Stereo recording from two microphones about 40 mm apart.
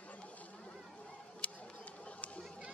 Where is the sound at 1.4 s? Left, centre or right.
Left.